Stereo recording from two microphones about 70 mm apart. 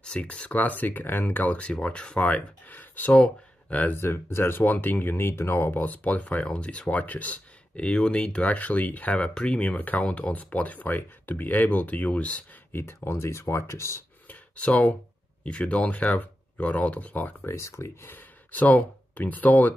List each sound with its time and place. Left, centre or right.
0.0 s speech: centre
4.0 s speech: left; by 12.4 s centre
12.7 s speech: left
14.2 s a sound: left
15.4 s speech: centre
17.5 s speech: left
18.0 s speech: left